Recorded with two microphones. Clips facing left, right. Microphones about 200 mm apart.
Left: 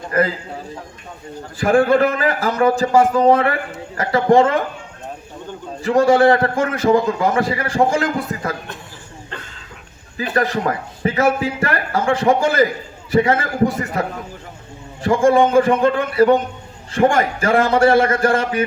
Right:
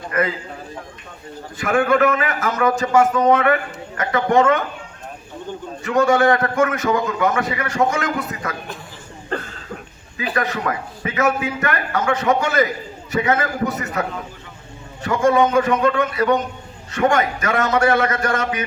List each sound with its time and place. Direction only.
0.1 s a man's voice: 35° left (ahead or behind)
1.5 s a man's voice: 30° left (ahead or behind)
5.8 s a man's voice: 30° left (ahead or behind)
10.3 s a man's voice: 30° left (ahead or behind)
15.0 s a man's voice: 30° left (ahead or behind)